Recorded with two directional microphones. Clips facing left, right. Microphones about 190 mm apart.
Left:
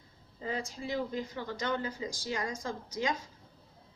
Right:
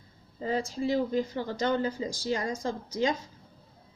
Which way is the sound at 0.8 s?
30° right (ahead or behind).